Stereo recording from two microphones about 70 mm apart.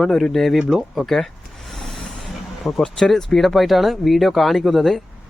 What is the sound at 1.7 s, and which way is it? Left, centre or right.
Vehicle, centre.